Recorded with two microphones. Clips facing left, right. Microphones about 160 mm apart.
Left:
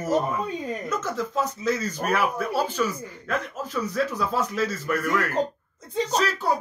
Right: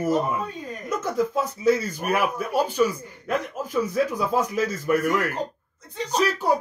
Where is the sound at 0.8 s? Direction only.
10° right (ahead or behind).